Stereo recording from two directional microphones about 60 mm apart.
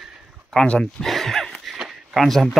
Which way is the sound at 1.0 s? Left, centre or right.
Centre.